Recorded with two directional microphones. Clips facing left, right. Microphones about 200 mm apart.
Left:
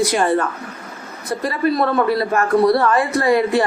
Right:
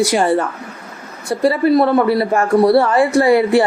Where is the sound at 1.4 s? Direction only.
25° right (ahead or behind).